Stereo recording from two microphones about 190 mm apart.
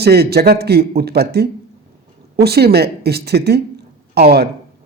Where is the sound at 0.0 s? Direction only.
55° right (ahead or behind).